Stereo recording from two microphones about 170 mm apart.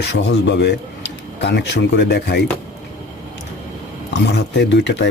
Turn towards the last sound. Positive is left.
turn(degrees=90)